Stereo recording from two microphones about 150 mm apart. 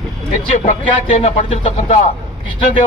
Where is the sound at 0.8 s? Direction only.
45° left (ahead or behind).